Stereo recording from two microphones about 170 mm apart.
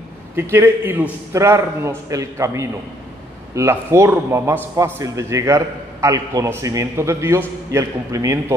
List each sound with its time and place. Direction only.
0.4 s a man's voice: 15° right (ahead or behind)